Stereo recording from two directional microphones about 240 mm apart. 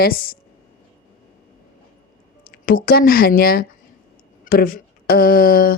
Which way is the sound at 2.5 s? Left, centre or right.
Left.